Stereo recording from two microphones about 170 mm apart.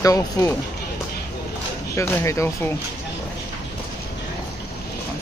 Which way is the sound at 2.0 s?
15° left (ahead or behind).